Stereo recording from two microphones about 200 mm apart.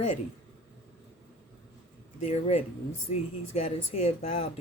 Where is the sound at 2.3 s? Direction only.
30° left (ahead or behind).